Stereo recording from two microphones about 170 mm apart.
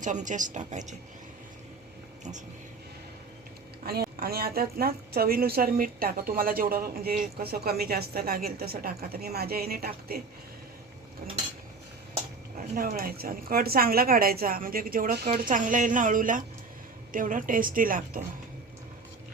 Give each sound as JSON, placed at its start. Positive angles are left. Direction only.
{"t": 0.0, "sound": "a woman's voice", "side_deg": -45}
{"t": 3.8, "sound": "a woman's voice", "side_deg": -65}
{"t": 12.7, "sound": "a woman's voice", "side_deg": -60}
{"t": 15.3, "sound": "a woman's voice", "side_deg": -50}